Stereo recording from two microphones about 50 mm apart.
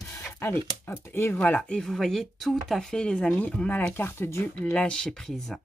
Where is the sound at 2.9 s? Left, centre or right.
Centre.